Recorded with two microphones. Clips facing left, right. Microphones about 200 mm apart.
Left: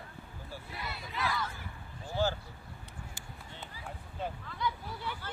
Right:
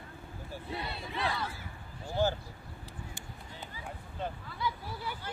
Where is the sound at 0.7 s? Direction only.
30° right (ahead or behind).